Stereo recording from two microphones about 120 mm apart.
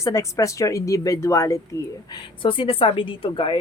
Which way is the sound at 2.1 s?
40° left (ahead or behind).